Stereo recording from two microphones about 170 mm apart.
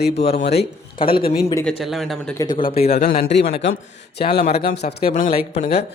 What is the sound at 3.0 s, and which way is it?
Speech, 70° left (ahead or behind).